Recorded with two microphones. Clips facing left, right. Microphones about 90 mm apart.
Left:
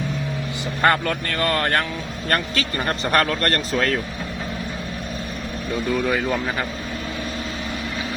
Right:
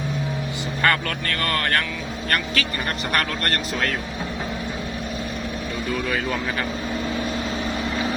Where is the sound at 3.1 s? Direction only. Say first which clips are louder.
Left 5 dB; 40° left (ahead or behind).